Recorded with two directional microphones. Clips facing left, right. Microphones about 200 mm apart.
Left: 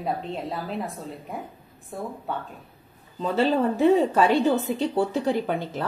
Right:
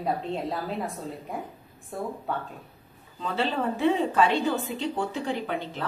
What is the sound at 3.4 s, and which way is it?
A woman's voice, 45° left (ahead or behind).